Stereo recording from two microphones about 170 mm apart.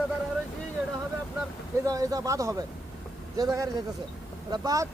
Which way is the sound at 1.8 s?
20° right (ahead or behind).